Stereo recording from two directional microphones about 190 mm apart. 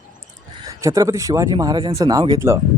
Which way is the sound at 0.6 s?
15° right (ahead or behind).